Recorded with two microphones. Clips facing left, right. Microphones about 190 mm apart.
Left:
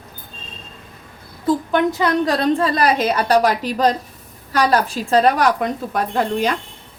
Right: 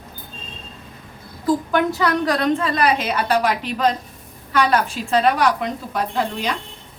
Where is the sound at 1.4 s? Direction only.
20° left (ahead or behind); by 6.5 s 50° left (ahead or behind).